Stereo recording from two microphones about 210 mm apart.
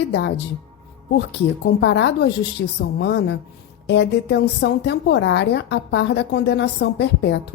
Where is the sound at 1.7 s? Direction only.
55° left (ahead or behind).